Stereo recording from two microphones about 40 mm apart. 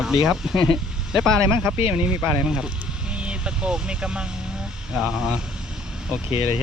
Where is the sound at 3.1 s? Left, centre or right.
Right; by 5.4 s centre.